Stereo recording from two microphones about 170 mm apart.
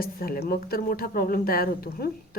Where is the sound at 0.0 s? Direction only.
60° left (ahead or behind).